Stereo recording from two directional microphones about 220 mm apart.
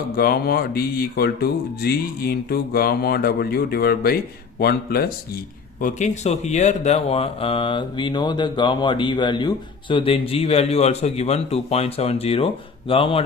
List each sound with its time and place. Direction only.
0.2 s speech: 45° left (ahead or behind)
5.8 s speech: 30° left (ahead or behind)